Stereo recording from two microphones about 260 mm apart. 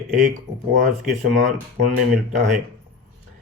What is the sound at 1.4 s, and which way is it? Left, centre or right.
Speech, right.